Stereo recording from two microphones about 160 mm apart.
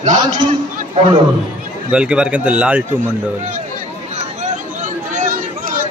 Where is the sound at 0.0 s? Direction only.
50° right (ahead or behind).